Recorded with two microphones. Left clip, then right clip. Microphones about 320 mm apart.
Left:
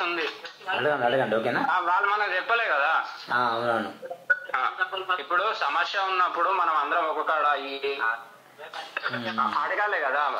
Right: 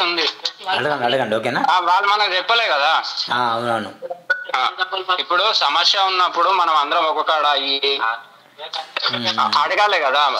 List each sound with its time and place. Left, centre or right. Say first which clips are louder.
0.0 s a sound: right 9 dB; right
0.7 s a man's voice: right 4 dB; right
1.7 s speech: right 10 dB; right
3.3 s a man's voice: right 4 dB; right
4.3 s speech: right 6 dB; right